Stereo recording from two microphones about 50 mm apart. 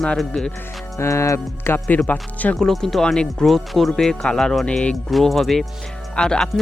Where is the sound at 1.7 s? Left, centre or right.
Left.